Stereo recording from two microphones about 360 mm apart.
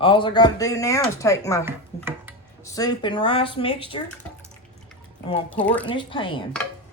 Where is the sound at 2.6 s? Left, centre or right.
Centre.